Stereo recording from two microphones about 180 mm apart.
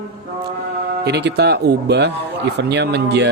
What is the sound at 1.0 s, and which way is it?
Speech, 70° right (ahead or behind).